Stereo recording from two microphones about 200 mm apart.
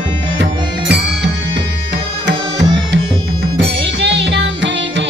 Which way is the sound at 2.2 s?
65° right (ahead or behind).